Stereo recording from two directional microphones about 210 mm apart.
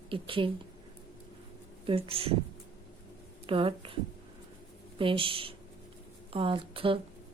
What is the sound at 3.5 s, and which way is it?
Speech, 25° right (ahead or behind).